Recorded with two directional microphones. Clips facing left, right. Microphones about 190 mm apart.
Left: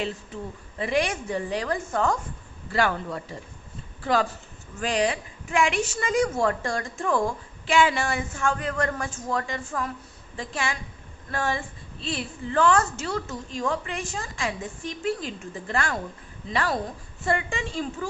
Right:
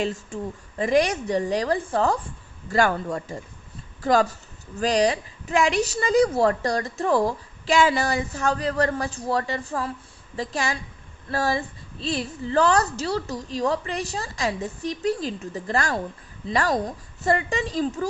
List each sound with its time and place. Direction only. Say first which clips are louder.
0.0 s a man's voice: right 4 dB; 45° right (ahead or behind)
2.6 s a man's voice: right 3 dB; 45° right (ahead or behind)